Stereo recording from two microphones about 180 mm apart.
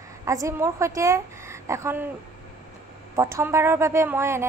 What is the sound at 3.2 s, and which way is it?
A woman's voice, 15° right (ahead or behind).